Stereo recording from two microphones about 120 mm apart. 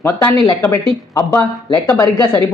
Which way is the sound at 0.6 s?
25° left (ahead or behind).